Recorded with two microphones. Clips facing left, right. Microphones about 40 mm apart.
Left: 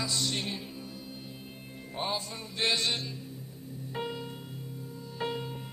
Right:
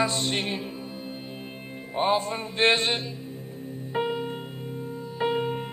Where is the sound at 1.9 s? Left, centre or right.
Right.